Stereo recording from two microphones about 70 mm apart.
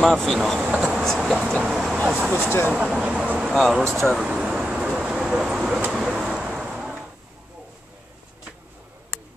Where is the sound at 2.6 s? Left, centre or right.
Centre.